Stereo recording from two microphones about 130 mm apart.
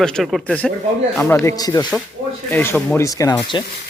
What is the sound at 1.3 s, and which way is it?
Speech, 25° left (ahead or behind).